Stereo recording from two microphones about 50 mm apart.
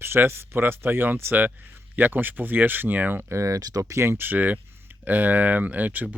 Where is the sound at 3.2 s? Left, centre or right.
Right.